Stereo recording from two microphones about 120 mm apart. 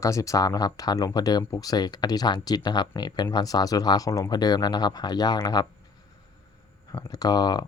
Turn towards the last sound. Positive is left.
turn(degrees=35)  # may be behind; listen again after turning